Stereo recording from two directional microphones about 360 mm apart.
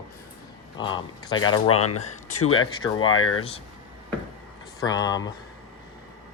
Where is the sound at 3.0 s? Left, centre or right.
Left.